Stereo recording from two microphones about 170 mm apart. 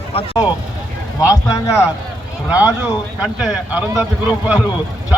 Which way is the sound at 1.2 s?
20° left (ahead or behind).